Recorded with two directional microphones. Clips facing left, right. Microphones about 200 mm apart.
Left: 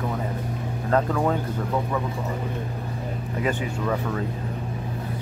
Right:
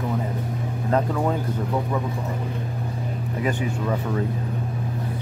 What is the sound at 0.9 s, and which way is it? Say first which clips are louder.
Speech: left 1 dB; 15° right (ahead or behind).